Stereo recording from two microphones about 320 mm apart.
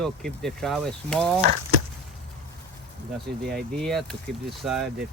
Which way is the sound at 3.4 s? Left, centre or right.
Right.